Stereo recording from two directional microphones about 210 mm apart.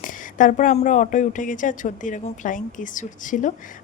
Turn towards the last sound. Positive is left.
turn(degrees=40)  # may be behind; listen again after turning